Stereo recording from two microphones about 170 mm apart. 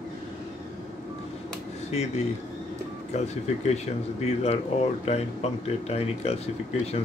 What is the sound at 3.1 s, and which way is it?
Speech, 40° left (ahead or behind).